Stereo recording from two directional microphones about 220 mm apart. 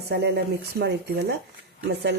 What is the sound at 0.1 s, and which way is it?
Speech, 45° right (ahead or behind).